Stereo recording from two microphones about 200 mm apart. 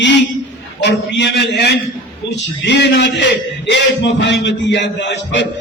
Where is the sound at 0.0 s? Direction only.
65° left (ahead or behind).